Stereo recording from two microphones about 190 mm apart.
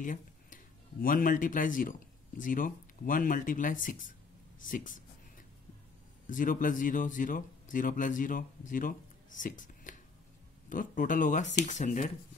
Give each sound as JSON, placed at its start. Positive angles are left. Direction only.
{"t": 0.0, "sound": "a sound", "side_deg": 45}
{"t": 1.0, "sound": "speech", "side_deg": 45}
{"t": 6.2, "sound": "speech", "side_deg": 45}